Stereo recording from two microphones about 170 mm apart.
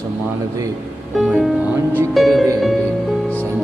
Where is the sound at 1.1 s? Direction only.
Centre (ahead or behind).